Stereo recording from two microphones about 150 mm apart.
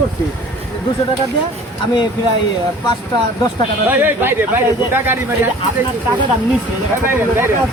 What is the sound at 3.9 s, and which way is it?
Speech, 15° right (ahead or behind).